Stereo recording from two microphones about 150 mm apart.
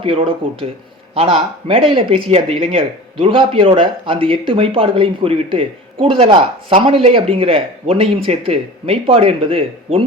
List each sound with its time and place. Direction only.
0.0 s speech: 40° right (ahead or behind)